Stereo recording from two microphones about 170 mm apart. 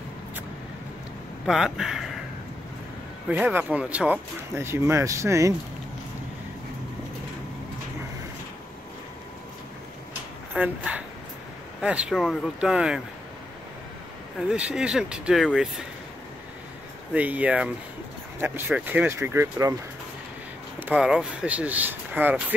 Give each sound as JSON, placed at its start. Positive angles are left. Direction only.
{"t": 1.4, "sound": "speech", "side_deg": 0}
{"t": 3.3, "sound": "speech", "side_deg": -10}
{"t": 10.5, "sound": "speech", "side_deg": -10}
{"t": 14.5, "sound": "speech", "side_deg": -5}
{"t": 17.1, "sound": "speech", "side_deg": -10}
{"t": 20.8, "sound": "speech", "side_deg": -5}